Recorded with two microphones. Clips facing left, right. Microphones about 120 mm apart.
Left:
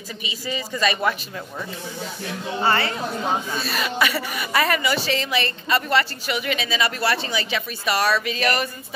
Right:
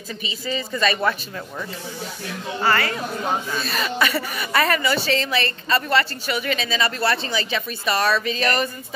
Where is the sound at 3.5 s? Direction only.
5° left (ahead or behind).